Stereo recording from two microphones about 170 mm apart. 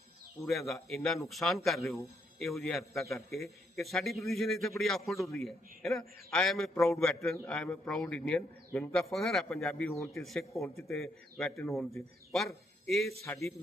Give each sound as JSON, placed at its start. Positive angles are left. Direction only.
{"t": 0.4, "sound": "a man's voice", "side_deg": 0}